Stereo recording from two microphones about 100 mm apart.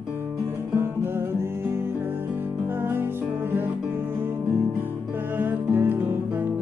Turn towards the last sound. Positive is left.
turn(degrees=-20)  # may be behind; listen again after turning